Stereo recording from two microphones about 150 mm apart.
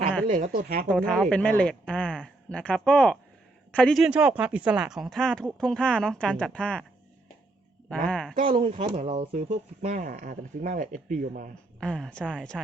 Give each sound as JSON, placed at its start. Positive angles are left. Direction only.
{"t": 0.3, "sound": "speech", "side_deg": -55}
{"t": 0.5, "sound": "a woman's voice", "side_deg": -80}
{"t": 0.9, "sound": "speech", "side_deg": 5}
{"t": 7.9, "sound": "speech", "side_deg": 10}
{"t": 8.4, "sound": "speech", "side_deg": -40}
{"t": 11.8, "sound": "speech", "side_deg": 5}